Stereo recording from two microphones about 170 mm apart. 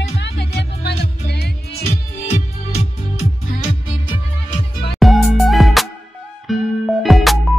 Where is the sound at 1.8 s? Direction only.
40° left (ahead or behind).